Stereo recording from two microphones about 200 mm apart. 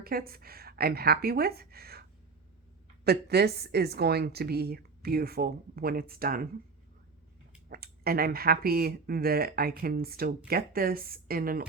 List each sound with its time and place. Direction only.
0.0 s speech: 50° right (ahead or behind)
7.7 s speech: 50° right (ahead or behind)